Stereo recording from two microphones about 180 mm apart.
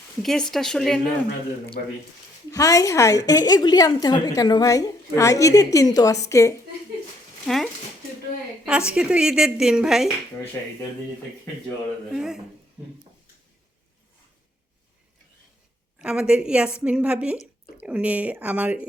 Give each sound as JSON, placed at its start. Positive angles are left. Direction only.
{"t": 0.2, "sound": "speech", "side_deg": 0}
{"t": 1.8, "sound": "speech", "side_deg": 60}
{"t": 2.5, "sound": "a woman's voice", "side_deg": 20}
{"t": 7.4, "sound": "speech", "side_deg": 0}
{"t": 9.0, "sound": "speech", "side_deg": -5}
{"t": 12.1, "sound": "speech", "side_deg": -5}
{"t": 16.0, "sound": "a woman's voice", "side_deg": -5}